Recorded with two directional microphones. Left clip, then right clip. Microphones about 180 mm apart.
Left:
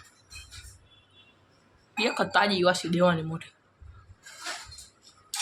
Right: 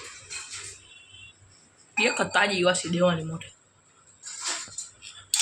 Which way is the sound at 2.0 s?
5° left (ahead or behind).